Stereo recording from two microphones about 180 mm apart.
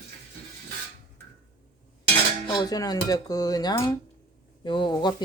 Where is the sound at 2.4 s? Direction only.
20° left (ahead or behind).